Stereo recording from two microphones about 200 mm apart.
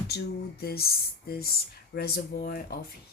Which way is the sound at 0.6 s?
50° left (ahead or behind).